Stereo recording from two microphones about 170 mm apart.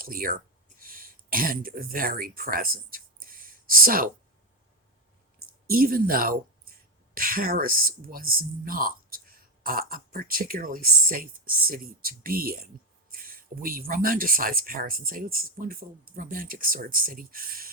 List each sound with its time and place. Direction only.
0.0 s speech: 55° right (ahead or behind)
5.6 s speech: 60° right (ahead or behind)